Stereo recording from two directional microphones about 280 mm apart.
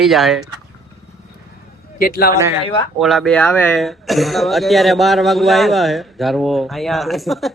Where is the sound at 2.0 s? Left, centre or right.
Left.